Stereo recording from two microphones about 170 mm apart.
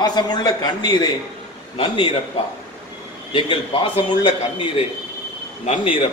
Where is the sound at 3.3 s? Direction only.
30° left (ahead or behind).